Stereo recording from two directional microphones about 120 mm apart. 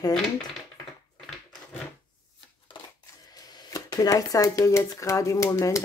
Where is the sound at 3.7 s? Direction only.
30° left (ahead or behind).